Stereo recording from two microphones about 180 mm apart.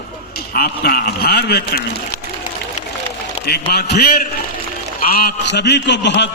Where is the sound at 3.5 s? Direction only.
65° left (ahead or behind).